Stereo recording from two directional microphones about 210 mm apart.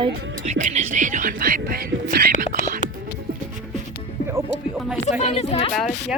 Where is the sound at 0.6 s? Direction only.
35° right (ahead or behind).